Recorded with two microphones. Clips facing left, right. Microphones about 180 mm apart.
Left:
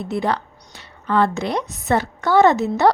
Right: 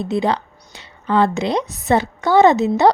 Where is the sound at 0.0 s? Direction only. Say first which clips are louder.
Right 3 dB; 20° right (ahead or behind).